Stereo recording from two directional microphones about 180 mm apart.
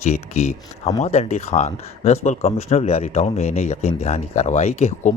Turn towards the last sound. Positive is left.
turn(degrees=40)  # may be behind; listen again after turning